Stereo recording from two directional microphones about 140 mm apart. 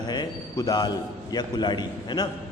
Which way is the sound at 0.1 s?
30° left (ahead or behind).